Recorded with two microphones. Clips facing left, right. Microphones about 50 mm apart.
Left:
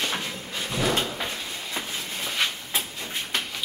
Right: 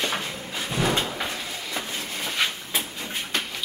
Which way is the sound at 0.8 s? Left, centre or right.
Right.